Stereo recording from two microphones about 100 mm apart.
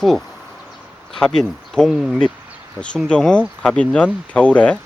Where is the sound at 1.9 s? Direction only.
5° right (ahead or behind).